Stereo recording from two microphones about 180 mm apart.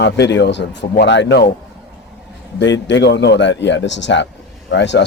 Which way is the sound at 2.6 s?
85° left.